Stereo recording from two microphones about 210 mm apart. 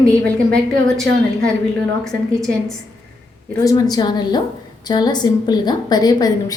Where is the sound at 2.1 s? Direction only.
Centre (ahead or behind).